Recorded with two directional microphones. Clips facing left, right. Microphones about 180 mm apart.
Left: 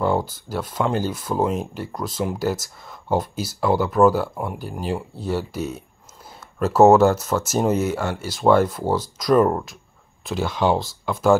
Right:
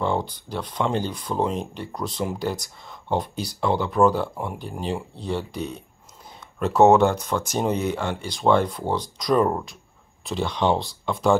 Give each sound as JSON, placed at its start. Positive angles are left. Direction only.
{"t": 0.0, "sound": "speech", "side_deg": 5}